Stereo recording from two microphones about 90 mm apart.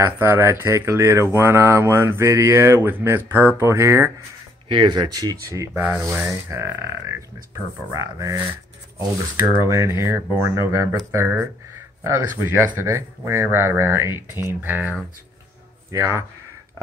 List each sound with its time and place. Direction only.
0.0 s speech: 25° right (ahead or behind)
4.6 s speech: 60° right (ahead or behind); by 15.0 s 20° right (ahead or behind)
15.9 s speech: 30° right (ahead or behind)